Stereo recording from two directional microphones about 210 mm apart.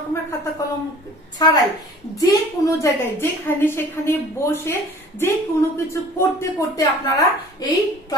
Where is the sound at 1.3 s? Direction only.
20° left (ahead or behind).